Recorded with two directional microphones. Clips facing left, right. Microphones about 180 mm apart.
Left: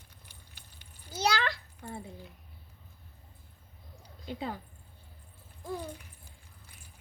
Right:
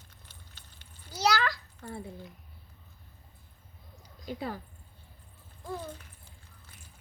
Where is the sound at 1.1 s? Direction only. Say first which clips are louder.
Right 2 dB; 25° left (ahead or behind).